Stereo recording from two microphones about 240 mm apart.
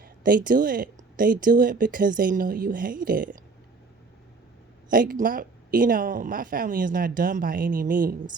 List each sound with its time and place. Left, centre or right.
0.0 s speech: right
4.9 s speech: right